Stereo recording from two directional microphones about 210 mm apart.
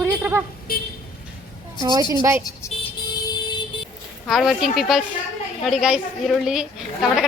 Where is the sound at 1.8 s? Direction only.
20° right (ahead or behind).